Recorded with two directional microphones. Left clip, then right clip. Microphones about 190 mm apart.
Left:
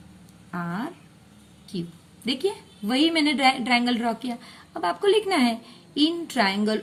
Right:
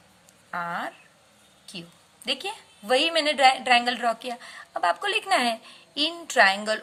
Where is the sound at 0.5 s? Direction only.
30° right (ahead or behind).